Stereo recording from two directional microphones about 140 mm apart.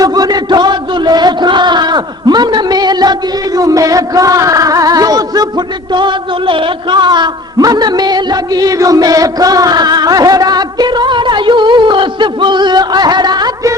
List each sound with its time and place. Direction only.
0.0 s chant: 25° right (ahead or behind)
3.6 s music: 25° right (ahead or behind)